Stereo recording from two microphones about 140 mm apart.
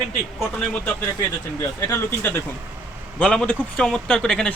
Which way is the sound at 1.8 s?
15° left (ahead or behind).